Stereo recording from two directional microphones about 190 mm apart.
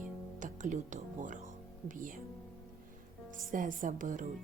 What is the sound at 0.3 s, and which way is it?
Speech, 40° right (ahead or behind).